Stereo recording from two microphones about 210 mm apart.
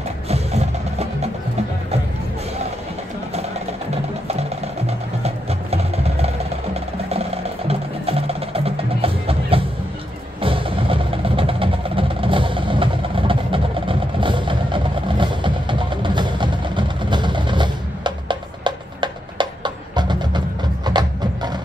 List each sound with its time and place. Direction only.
0.3 s music: 30° right (ahead or behind)
4.3 s music: 30° right (ahead or behind)